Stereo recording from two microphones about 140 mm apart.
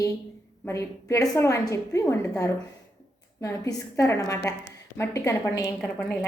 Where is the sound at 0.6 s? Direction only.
20° left (ahead or behind).